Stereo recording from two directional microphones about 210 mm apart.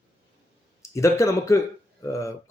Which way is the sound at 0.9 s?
15° left (ahead or behind).